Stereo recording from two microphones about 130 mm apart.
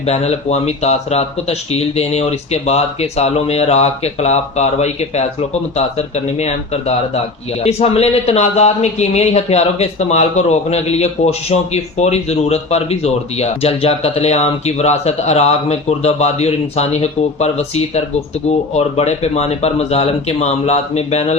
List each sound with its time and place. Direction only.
0.0 s a man's voice: 55° left (ahead or behind)